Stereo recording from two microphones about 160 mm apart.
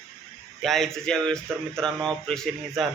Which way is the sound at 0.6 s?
Centre (ahead or behind).